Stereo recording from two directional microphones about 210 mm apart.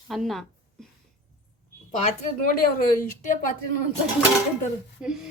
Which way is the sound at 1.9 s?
40° left (ahead or behind).